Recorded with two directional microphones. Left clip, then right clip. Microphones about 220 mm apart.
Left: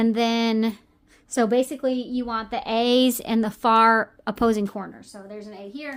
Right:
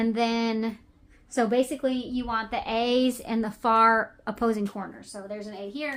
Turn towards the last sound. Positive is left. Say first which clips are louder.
# right 2 dB
turn(degrees=30)  # may be behind; listen again after turning